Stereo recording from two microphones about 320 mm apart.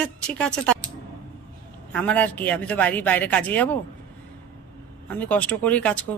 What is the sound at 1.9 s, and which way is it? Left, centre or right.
A man's voice, centre.